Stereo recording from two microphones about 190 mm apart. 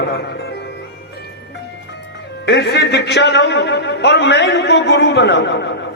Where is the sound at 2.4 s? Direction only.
60° left (ahead or behind).